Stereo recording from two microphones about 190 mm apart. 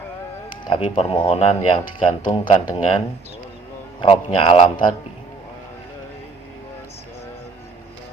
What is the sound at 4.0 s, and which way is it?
Speech, 25° left (ahead or behind).